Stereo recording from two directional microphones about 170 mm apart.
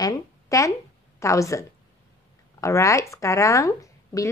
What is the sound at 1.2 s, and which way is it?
A woman's voice, 20° left (ahead or behind).